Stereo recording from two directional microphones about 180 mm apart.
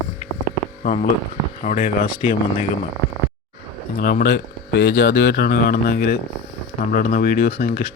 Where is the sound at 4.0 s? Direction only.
55° left (ahead or behind).